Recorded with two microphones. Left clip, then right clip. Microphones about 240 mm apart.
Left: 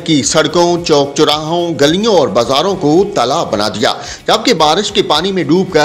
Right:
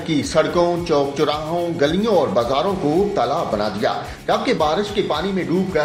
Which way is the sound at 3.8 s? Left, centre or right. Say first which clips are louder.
Left 7 dB; left.